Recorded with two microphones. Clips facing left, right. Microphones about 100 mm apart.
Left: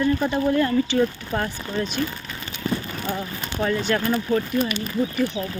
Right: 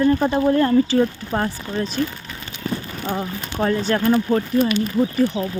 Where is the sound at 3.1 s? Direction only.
35° right (ahead or behind).